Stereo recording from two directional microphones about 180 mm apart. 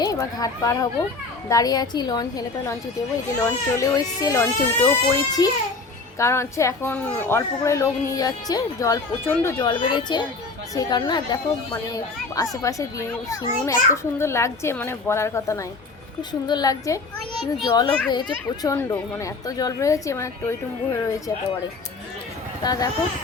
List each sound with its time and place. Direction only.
0.0 s speech: 20° left (ahead or behind)
3.4 s a child's voice: 20° left (ahead or behind)
9.6 s a child's voice: 25° left (ahead or behind)
22.6 s speech: 20° left (ahead or behind)